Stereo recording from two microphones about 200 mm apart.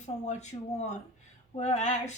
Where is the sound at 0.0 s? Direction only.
35° left (ahead or behind).